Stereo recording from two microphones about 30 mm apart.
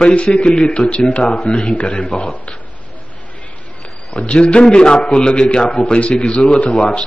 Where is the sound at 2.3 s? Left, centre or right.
Left.